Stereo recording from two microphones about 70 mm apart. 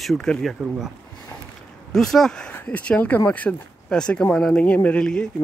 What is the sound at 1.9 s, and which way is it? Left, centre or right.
Speech, centre.